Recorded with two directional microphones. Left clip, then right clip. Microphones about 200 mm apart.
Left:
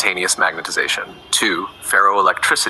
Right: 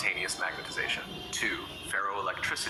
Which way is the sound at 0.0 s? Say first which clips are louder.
Left 14 dB; 50° left (ahead or behind).